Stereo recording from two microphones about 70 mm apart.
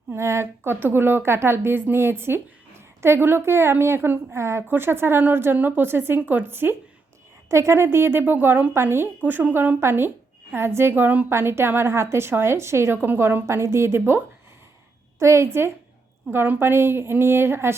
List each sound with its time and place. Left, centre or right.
0.1 s a woman's voice: right
7.5 s a woman's voice: right
11.3 s a woman's voice: right
15.2 s a woman's voice: right
16.3 s a woman's voice: right